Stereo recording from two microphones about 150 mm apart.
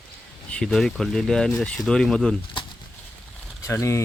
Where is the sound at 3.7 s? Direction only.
20° left (ahead or behind).